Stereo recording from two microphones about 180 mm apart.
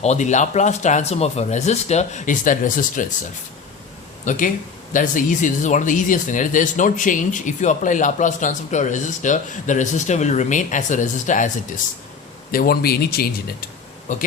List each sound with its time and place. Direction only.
0.0 s speech: 40° left (ahead or behind)
4.3 s speech: 45° left (ahead or behind)
12.5 s speech: 55° left (ahead or behind)
14.1 s speech: 45° left (ahead or behind)